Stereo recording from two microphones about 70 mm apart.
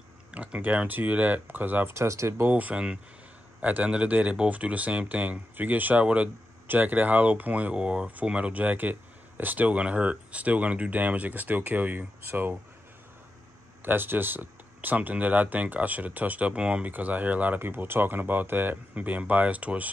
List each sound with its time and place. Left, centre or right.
0.3 s speech: centre
2.0 s speech: right
2.5 s speech: centre
13.8 s speech: right